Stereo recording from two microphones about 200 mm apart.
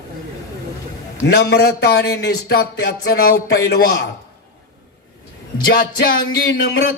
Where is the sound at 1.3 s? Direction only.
55° left (ahead or behind).